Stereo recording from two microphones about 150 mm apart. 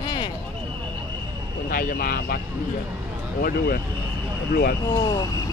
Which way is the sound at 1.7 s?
75° left (ahead or behind).